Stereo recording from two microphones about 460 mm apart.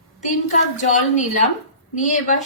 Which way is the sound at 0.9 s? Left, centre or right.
Centre.